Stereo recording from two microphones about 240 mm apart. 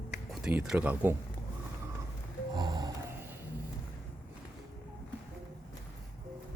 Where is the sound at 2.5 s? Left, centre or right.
Centre.